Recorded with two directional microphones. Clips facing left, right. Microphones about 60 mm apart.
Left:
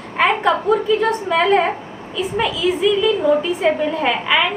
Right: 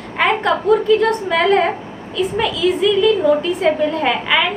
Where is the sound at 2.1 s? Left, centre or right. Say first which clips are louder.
Right 2 dB; centre.